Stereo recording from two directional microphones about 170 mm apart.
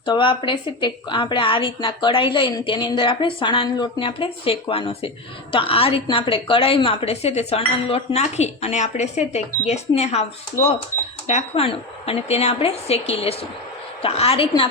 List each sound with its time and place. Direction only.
0.0 s a woman's voice: 30° left (ahead or behind)
11.3 s a woman's voice: 35° left (ahead or behind)